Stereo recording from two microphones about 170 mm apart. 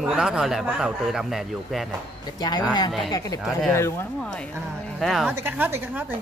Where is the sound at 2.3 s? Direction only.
25° left (ahead or behind).